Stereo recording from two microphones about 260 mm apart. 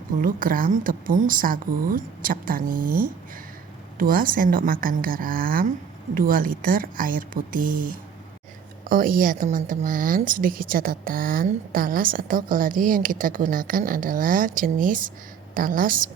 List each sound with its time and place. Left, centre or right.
0.2 s a woman's voice: right
8.9 s a woman's voice: right